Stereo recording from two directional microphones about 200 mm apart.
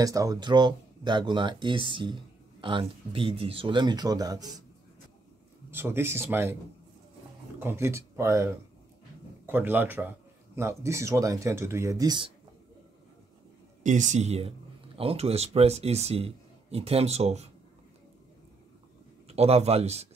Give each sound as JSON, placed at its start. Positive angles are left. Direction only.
{"t": 0.0, "sound": "speech", "side_deg": -15}
{"t": 5.7, "sound": "speech", "side_deg": -10}
{"t": 7.5, "sound": "speech", "side_deg": -10}
{"t": 9.5, "sound": "speech", "side_deg": -10}
{"t": 13.8, "sound": "speech", "side_deg": -35}
{"t": 19.2, "sound": "a man's voice", "side_deg": -30}